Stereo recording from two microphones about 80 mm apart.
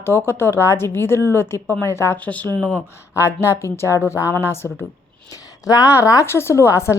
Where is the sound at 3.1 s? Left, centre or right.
Left.